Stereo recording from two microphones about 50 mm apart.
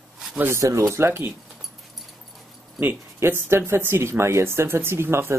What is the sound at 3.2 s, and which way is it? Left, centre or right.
Speech, right.